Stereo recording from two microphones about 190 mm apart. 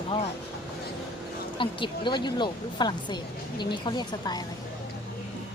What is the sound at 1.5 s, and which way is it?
Speech, 25° left (ahead or behind).